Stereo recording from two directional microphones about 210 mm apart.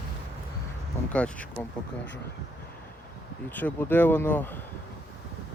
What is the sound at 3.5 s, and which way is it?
Speech, 10° left (ahead or behind).